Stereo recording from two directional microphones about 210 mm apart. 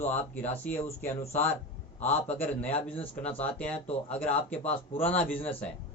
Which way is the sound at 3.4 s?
5° left (ahead or behind).